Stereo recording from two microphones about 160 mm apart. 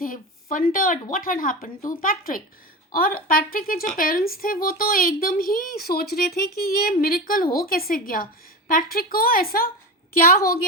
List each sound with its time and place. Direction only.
0.5 s a woman's voice: 60° left (ahead or behind)